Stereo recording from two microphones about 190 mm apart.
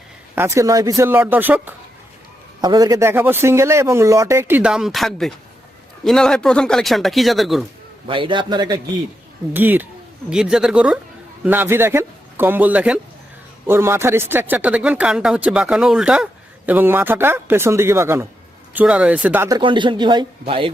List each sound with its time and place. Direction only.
0.3 s speech: 15° right (ahead or behind)
2.6 s speech: 20° right (ahead or behind); by 7.6 s centre (ahead or behind)
8.0 s a man's voice: 25° right (ahead or behind)
9.5 s speech: 10° right (ahead or behind)